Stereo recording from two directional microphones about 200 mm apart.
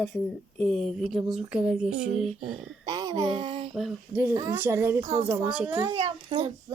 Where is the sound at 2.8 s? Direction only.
20° right (ahead or behind).